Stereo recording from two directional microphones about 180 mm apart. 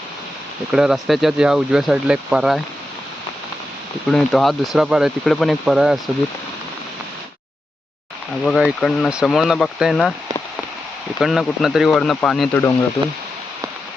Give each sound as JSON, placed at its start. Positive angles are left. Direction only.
{"t": 0.7, "sound": "speech", "side_deg": -5}
{"t": 4.1, "sound": "speech", "side_deg": 0}
{"t": 8.4, "sound": "speech", "side_deg": -5}
{"t": 11.2, "sound": "speech", "side_deg": 0}